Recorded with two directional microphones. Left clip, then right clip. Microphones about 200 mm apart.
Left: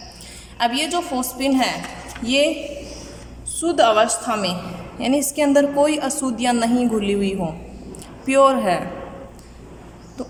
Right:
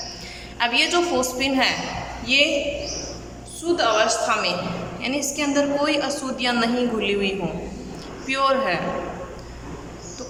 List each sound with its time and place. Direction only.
0.6 s a woman's voice: 30° left (ahead or behind)
3.6 s a woman's voice: 40° left (ahead or behind)